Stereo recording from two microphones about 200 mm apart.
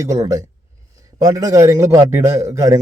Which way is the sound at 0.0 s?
15° right (ahead or behind).